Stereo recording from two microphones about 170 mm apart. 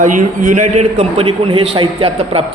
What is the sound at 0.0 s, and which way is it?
A man's voice, 45° right (ahead or behind).